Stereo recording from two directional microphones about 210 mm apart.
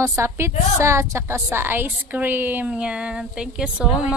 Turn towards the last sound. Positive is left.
turn(degrees=-5)  # may be behind; listen again after turning